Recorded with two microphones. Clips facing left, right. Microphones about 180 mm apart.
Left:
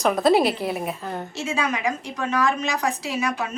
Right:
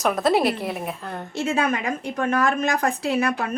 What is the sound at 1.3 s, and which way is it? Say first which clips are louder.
A woman's voice: right 5 dB; 55° right (ahead or behind).